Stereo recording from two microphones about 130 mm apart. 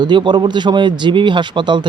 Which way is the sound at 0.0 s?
35° right (ahead or behind).